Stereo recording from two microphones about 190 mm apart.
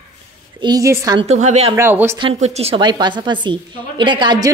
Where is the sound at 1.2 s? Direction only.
35° right (ahead or behind).